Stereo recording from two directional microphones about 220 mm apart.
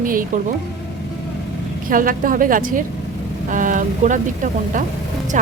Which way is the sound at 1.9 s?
40° right (ahead or behind).